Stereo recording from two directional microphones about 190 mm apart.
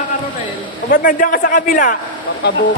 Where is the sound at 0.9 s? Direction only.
45° left (ahead or behind).